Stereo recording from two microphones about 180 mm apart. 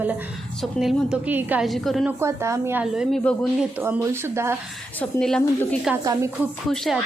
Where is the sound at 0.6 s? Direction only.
Centre (ahead or behind).